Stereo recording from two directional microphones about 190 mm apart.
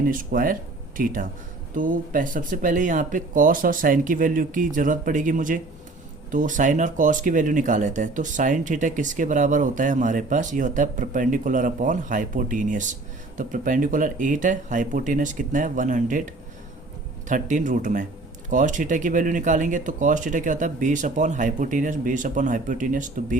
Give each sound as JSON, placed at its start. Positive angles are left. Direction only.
{"t": 0.1, "sound": "speech", "side_deg": -45}
{"t": 17.2, "sound": "speech", "side_deg": -40}